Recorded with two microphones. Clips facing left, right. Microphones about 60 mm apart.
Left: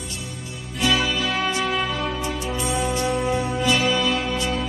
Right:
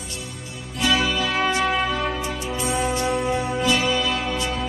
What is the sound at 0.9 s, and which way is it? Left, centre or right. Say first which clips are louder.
Music: right 2 dB; centre.